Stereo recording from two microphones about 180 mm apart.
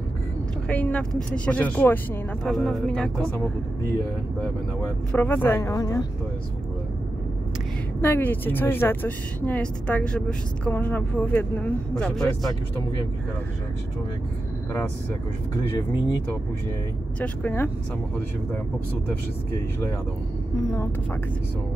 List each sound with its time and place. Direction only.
0.7 s speech: 10° left (ahead or behind)
5.1 s speech: 10° left (ahead or behind)
8.0 s speech: 10° left (ahead or behind)
17.2 s speech: 10° left (ahead or behind)
20.5 s speech: 15° left (ahead or behind)